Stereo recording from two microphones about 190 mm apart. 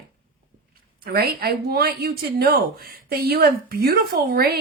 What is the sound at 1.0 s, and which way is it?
A woman's voice, 55° right (ahead or behind).